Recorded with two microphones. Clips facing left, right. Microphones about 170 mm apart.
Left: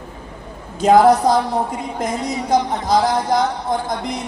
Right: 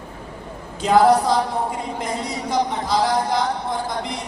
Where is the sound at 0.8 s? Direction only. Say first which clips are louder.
Left 3 dB; 45° left (ahead or behind).